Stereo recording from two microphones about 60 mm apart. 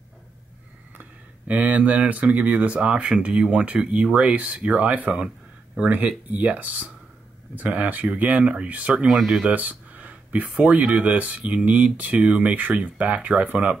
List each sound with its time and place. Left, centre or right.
1.5 s speech: right
9.0 s speech: centre
9.4 s speech: right